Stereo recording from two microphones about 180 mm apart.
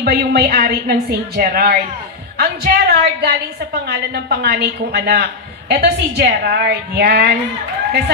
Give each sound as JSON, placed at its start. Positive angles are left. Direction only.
{"t": 0.0, "sound": "a woman's voice", "side_deg": -60}